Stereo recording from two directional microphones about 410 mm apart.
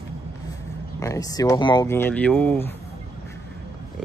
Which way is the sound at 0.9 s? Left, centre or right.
Centre.